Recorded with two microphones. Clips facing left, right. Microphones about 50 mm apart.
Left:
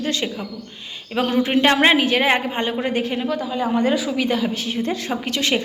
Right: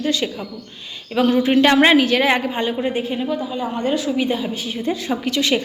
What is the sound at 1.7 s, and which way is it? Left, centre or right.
A woman's voice, centre.